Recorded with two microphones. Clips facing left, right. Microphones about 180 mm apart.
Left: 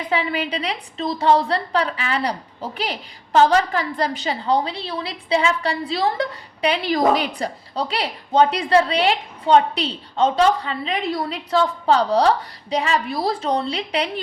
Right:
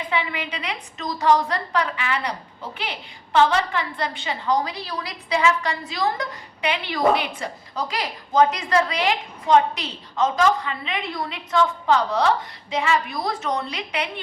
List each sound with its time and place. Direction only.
0.1 s a woman's voice: 35° left (ahead or behind)